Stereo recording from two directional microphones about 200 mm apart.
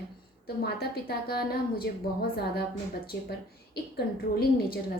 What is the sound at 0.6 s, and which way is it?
A woman's voice, 50° left (ahead or behind).